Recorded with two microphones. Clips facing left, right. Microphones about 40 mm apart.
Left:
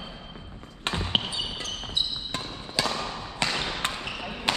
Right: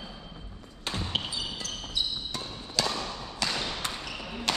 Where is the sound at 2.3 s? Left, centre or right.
Left.